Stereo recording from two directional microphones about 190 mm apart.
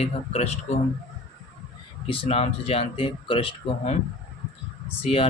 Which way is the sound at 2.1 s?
30° left (ahead or behind).